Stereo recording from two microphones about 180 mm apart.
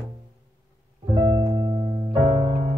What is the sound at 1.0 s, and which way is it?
Music, 20° right (ahead or behind).